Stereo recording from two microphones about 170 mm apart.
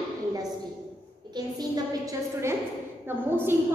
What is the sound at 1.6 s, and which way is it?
A woman's voice, 20° right (ahead or behind).